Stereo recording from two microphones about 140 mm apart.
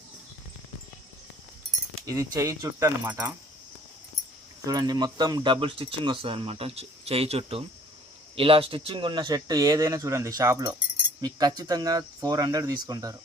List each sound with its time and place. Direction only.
2.0 s speech: 25° right (ahead or behind)
4.6 s speech: 25° right (ahead or behind)